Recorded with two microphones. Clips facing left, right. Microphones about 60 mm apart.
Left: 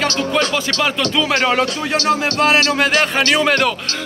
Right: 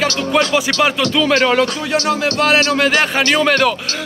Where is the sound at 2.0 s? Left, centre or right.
Left.